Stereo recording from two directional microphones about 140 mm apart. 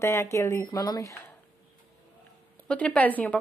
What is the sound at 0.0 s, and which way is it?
Speech, 20° left (ahead or behind).